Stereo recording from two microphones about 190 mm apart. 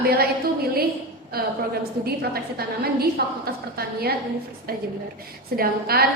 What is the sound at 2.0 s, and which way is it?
A woman's voice, 55° right (ahead or behind).